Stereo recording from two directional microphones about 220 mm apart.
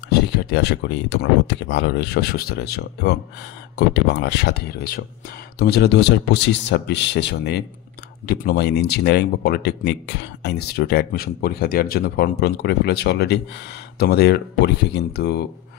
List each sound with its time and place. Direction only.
0.4 s speech: 50° left (ahead or behind)